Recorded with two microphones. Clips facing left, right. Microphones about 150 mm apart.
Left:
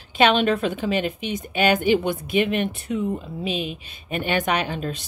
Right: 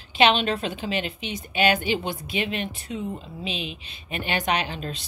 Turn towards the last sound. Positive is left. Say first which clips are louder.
# left 3 dB
turn(degrees=50)  # may be behind; listen again after turning